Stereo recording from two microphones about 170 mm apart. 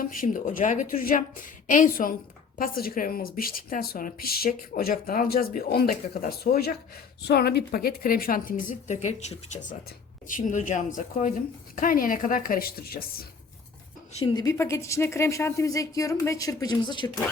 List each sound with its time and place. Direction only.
0.0 s a woman's voice: 50° left (ahead or behind)
14.1 s a woman's voice: 35° left (ahead or behind)
14.3 s speech: 20° left (ahead or behind)